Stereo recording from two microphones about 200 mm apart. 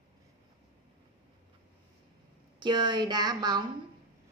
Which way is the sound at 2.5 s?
20° right (ahead or behind).